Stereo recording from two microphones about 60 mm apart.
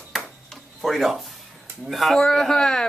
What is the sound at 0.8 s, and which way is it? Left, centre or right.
Speech, centre.